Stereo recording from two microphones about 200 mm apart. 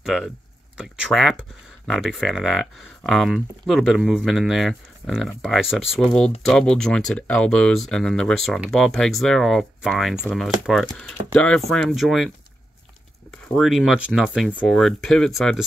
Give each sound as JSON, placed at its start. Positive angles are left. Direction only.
{"t": 0.0, "sound": "speech", "side_deg": 0}
{"t": 13.3, "sound": "speech", "side_deg": 0}